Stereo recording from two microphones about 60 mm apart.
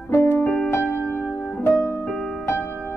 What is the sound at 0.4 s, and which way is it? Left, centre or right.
Music, left.